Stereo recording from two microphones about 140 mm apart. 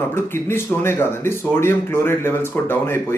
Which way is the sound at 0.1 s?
15° left (ahead or behind).